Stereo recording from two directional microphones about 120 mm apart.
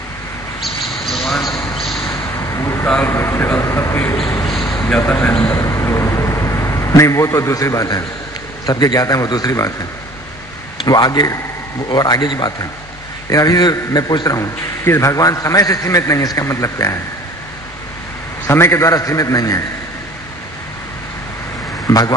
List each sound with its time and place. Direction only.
0.6 s bird: centre (ahead or behind)
2.0 s vehicle: 25° left (ahead or behind)
2.9 s a man's voice: 20° left (ahead or behind)
4.5 s a man's voice: 5° left (ahead or behind)
5.6 s a sound: 25° left (ahead or behind)
8.6 s a man's voice: 35° left (ahead or behind)
10.9 s a man's voice: 35° left (ahead or behind)
18.5 s a man's voice: 20° left (ahead or behind)
21.8 s speech: 30° left (ahead or behind)